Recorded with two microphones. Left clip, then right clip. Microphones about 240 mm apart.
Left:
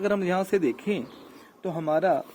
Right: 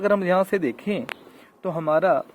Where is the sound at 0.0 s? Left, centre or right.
Right.